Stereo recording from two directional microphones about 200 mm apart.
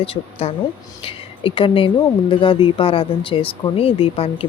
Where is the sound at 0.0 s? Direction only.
30° left (ahead or behind).